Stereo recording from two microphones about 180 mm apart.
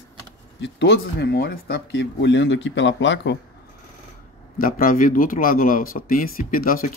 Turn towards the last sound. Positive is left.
turn(degrees=50)  # may be behind; listen again after turning